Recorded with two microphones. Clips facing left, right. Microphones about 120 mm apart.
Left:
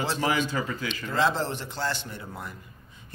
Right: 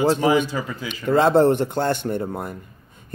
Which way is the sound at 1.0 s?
55° right (ahead or behind).